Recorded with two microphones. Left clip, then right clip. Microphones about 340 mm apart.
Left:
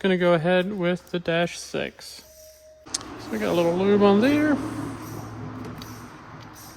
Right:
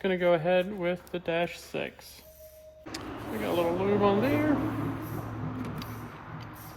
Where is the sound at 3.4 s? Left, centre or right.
Left.